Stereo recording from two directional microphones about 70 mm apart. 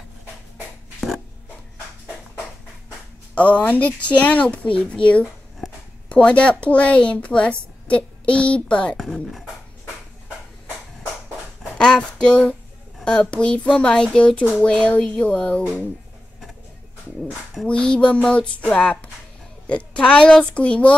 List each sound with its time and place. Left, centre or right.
3.3 s speech: centre
8.9 s speech: centre
11.8 s a sound: centre
13.0 s speech: centre
17.6 s speech: centre